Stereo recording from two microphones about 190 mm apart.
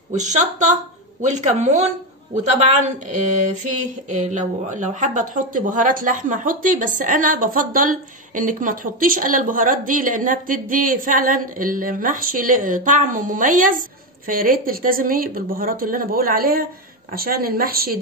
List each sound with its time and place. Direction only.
0.1 s a woman's voice: 40° right (ahead or behind)